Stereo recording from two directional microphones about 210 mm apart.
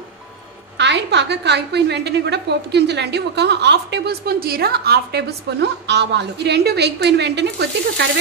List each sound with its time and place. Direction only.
0.7 s a woman's voice: 55° right (ahead or behind)